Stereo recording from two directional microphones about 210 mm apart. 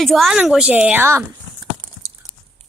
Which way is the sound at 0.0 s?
Centre (ahead or behind).